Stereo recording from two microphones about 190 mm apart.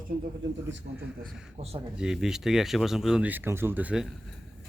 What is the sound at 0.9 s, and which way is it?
Speech, 55° right (ahead or behind).